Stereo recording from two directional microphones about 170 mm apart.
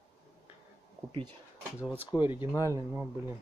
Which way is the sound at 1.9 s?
10° right (ahead or behind).